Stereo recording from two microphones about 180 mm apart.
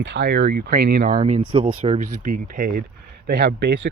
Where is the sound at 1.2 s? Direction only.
45° right (ahead or behind).